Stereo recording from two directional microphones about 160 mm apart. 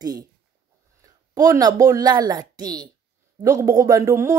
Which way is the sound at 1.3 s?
25° right (ahead or behind).